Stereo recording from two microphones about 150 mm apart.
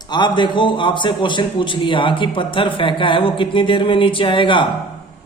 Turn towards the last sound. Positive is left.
turn(degrees=35)  # may be behind; listen again after turning